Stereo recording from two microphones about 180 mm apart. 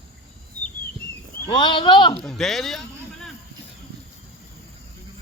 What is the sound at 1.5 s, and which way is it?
Speech, 25° left (ahead or behind).